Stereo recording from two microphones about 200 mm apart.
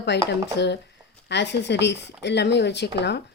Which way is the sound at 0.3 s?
60° left (ahead or behind).